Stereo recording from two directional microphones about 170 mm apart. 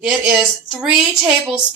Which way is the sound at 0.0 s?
5° right (ahead or behind).